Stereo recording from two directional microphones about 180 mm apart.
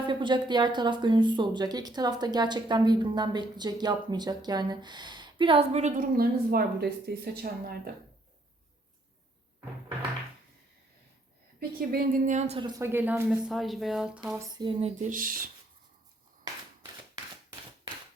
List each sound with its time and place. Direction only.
0.1 s speech: 25° right (ahead or behind)
6.0 s a woman's voice: 55° right (ahead or behind)
11.8 s a woman's voice: 50° right (ahead or behind)
12.5 s speech: 20° right (ahead or behind)
13.2 s speech: centre (ahead or behind)
14.3 s a sound: 25° right (ahead or behind)
15.1 s a woman's voice: 50° right (ahead or behind)